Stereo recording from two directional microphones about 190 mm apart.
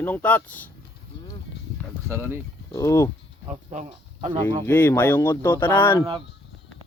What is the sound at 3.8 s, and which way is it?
Speech, 30° right (ahead or behind).